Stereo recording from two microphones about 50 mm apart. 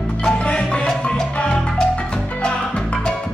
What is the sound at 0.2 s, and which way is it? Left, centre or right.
Music, left.